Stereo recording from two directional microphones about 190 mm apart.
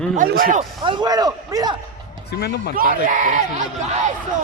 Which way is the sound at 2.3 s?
60° left (ahead or behind).